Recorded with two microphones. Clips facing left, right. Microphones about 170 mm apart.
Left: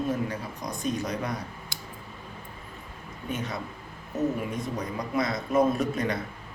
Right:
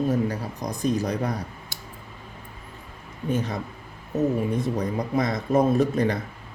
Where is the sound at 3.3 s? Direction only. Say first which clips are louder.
Right 7 dB; 30° right (ahead or behind).